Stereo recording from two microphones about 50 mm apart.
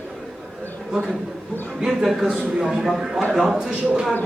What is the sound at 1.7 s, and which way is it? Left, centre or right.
A man's voice, centre.